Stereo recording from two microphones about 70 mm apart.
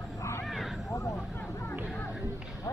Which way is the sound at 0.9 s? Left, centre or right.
Left.